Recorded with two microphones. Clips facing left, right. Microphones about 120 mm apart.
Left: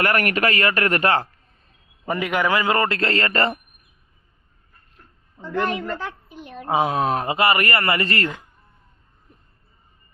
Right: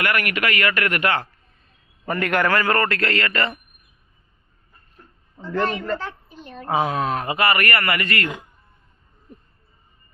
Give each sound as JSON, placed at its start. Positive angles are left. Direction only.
{"t": 0.0, "sound": "speech", "side_deg": 40}
{"t": 2.1, "sound": "a man's voice", "side_deg": 5}
{"t": 5.4, "sound": "a woman's voice", "side_deg": 15}
{"t": 7.0, "sound": "a man's voice", "side_deg": 35}